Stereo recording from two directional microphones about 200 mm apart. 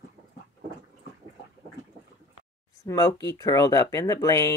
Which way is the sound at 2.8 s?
15° left (ahead or behind).